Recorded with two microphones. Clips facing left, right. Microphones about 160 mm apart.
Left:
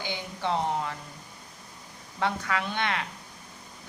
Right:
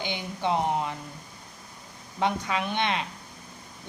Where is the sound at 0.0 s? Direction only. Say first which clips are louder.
Right 2 dB; 20° right (ahead or behind).